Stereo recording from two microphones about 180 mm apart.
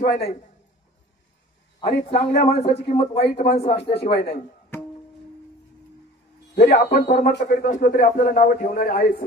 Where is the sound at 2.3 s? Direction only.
40° left (ahead or behind).